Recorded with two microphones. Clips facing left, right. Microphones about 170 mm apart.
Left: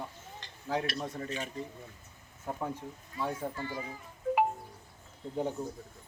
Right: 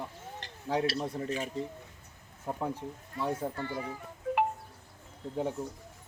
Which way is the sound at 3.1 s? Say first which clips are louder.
Right 2 dB; 60° right (ahead or behind).